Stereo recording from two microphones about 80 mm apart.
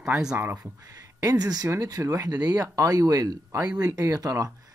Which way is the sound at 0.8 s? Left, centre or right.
Right.